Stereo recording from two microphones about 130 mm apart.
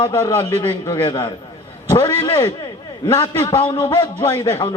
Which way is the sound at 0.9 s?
25° left (ahead or behind).